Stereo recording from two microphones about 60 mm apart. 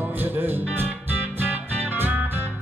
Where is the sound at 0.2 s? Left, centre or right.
Right.